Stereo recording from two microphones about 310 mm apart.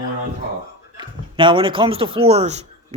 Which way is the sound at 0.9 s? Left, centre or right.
Centre.